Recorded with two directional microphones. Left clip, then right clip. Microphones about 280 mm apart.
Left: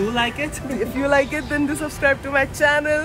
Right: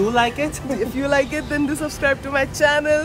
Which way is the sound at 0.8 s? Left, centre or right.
Centre.